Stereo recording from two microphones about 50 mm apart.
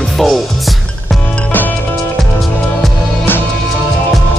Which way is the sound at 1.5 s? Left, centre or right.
Left.